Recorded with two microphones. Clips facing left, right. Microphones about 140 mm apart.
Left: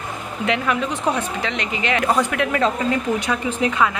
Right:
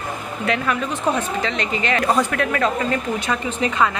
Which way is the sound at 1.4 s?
15° left (ahead or behind).